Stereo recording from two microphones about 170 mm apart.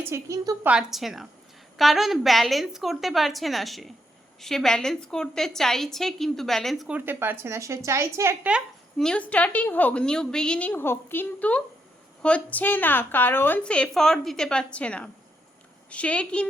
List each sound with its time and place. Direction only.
0.0 s a woman's voice: 20° right (ahead or behind)
0.7 s a woman's voice: 5° right (ahead or behind)